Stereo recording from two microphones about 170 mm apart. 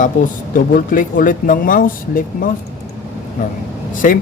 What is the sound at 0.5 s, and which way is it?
Speech, 55° left (ahead or behind).